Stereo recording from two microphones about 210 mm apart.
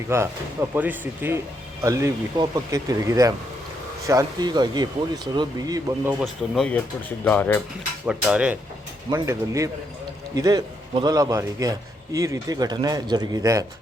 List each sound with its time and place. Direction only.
0.1 s a man's voice: 10° right (ahead or behind)
6.1 s speech: centre (ahead or behind)
8.0 s a man's voice: 5° right (ahead or behind)